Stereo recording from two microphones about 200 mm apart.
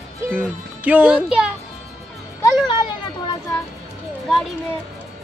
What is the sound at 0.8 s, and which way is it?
Speech, 5° right (ahead or behind).